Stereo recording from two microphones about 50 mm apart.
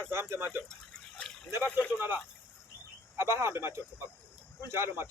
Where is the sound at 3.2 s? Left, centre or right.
Right.